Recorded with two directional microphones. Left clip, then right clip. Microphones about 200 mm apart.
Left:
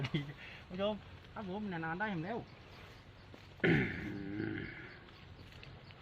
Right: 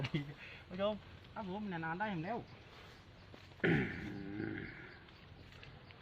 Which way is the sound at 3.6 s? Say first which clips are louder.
Left 3 dB; 15° left (ahead or behind).